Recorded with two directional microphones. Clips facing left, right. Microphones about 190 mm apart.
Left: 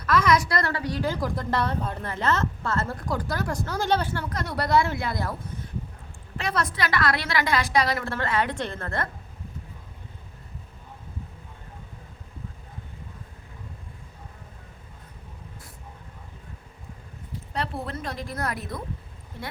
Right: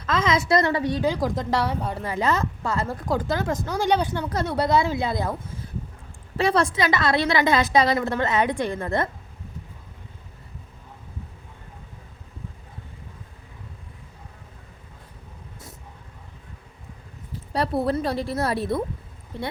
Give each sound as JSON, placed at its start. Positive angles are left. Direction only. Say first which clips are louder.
{"t": 0.0, "sound": "a woman's voice", "louder": "left 1 dB", "side_deg": -25}
{"t": 6.3, "sound": "a woman's voice", "louder": "right 7 dB", "side_deg": -30}
{"t": 17.5, "sound": "a woman's voice", "louder": "right 9 dB", "side_deg": -35}